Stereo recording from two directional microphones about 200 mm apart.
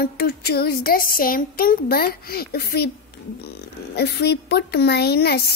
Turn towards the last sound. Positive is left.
turn(degrees=50)  # may be behind; listen again after turning